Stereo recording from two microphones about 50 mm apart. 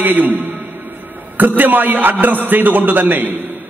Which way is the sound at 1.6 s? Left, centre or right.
Right.